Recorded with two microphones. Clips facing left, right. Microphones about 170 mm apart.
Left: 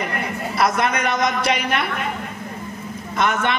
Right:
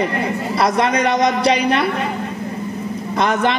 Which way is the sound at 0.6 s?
30° right (ahead or behind).